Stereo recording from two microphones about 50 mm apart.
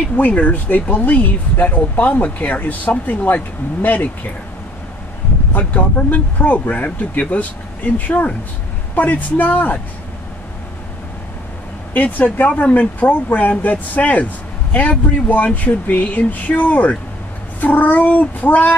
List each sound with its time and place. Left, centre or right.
0.1 s speech: left
5.5 s speech: left
11.9 s speech: left